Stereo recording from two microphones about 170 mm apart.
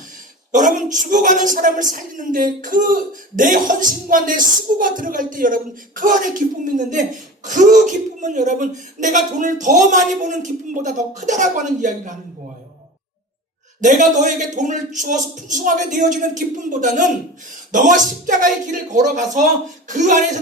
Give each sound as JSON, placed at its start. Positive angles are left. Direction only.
{"t": 0.5, "sound": "a woman's voice", "side_deg": -50}
{"t": 13.8, "sound": "a woman's voice", "side_deg": -45}